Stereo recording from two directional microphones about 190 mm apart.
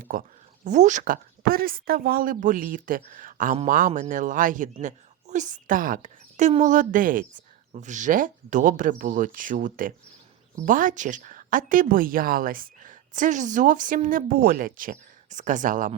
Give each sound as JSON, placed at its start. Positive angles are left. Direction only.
{"t": 0.0, "sound": "speech", "side_deg": -45}